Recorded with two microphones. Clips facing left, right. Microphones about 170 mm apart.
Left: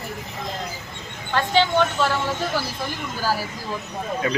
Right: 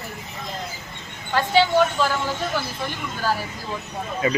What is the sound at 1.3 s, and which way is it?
Speech, 10° right (ahead or behind).